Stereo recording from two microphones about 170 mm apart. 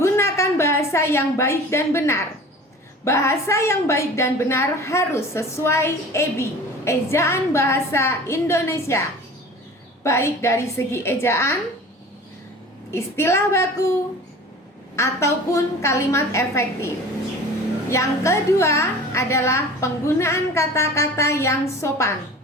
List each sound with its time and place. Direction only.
0.0 s a woman's voice: 15° left (ahead or behind)
10.0 s a woman's voice: 15° left (ahead or behind)
12.9 s a woman's voice: 15° left (ahead or behind)
14.9 s a woman's voice: 15° left (ahead or behind)